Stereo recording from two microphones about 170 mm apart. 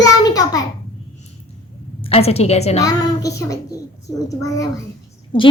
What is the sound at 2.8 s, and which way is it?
A woman's voice, 20° left (ahead or behind).